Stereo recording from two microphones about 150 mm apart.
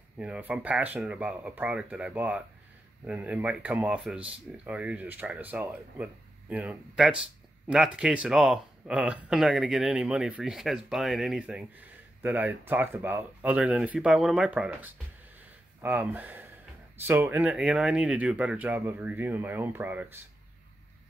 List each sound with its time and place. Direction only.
0.2 s speech: 10° right (ahead or behind)